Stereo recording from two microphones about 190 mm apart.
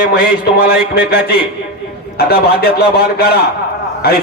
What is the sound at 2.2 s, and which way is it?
A man's voice, 55° left (ahead or behind).